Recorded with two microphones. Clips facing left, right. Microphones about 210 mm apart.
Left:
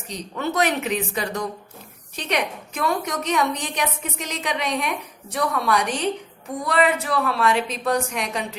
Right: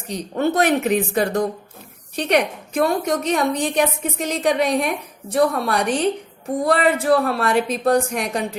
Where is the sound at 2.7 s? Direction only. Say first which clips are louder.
Right 6 dB; 30° right (ahead or behind).